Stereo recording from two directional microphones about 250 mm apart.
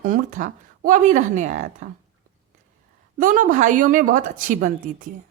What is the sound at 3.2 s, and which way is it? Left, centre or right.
A woman's voice, right.